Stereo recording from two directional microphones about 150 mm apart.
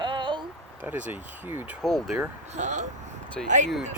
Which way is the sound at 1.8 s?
Centre (ahead or behind).